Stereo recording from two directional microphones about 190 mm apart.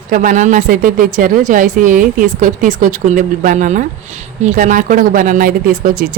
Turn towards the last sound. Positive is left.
turn(degrees=-50)  # may be behind; listen again after turning